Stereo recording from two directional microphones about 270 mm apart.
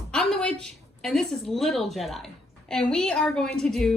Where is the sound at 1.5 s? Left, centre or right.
Centre.